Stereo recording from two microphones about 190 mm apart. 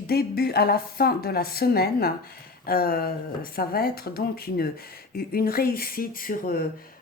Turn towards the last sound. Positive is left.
turn(degrees=50)  # may be behind; listen again after turning